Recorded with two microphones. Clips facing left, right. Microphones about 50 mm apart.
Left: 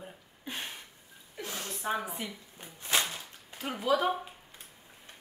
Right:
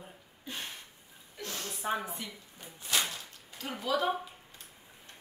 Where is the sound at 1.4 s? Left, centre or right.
Centre.